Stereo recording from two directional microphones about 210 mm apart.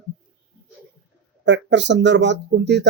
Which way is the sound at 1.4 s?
60° right (ahead or behind).